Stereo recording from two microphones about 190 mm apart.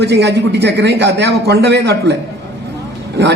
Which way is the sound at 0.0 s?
65° right (ahead or behind).